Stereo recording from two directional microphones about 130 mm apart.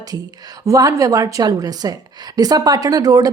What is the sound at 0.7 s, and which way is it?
A woman's voice, 25° right (ahead or behind).